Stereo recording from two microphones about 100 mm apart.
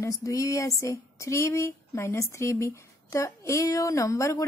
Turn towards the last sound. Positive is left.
turn(degrees=35)  # may be behind; listen again after turning